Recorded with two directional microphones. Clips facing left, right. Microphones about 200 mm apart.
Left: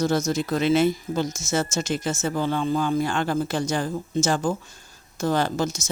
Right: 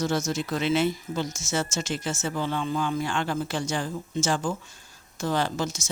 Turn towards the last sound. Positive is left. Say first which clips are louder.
# left 3 dB
turn(degrees=40)  # may be behind; listen again after turning